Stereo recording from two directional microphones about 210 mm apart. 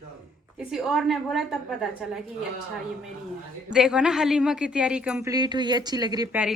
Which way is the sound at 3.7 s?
5° right (ahead or behind).